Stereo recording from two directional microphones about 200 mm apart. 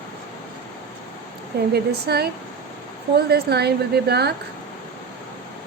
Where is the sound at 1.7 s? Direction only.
50° right (ahead or behind).